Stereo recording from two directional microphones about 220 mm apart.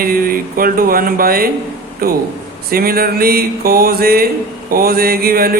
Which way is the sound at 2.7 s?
45° right (ahead or behind).